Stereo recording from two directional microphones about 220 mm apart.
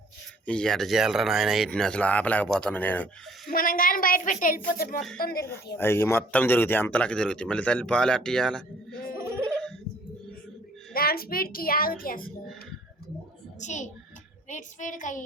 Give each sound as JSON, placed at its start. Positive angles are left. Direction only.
{"t": 0.4, "sound": "speech", "side_deg": 5}
{"t": 3.5, "sound": "speech", "side_deg": 40}
{"t": 5.7, "sound": "speech", "side_deg": 10}
{"t": 10.9, "sound": "speech", "side_deg": 45}
{"t": 13.6, "sound": "speech", "side_deg": 35}